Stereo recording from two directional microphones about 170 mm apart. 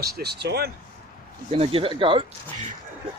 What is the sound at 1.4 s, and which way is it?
Speech, 35° right (ahead or behind).